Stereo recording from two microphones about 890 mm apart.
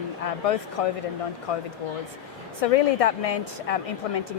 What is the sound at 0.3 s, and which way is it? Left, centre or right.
Speech, left.